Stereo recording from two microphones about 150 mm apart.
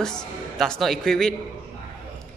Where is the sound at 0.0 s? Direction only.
5° left (ahead or behind).